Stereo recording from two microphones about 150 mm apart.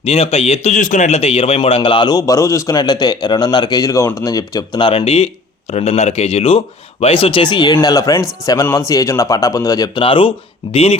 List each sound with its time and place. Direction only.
0.0 s a man's voice: 40° left (ahead or behind)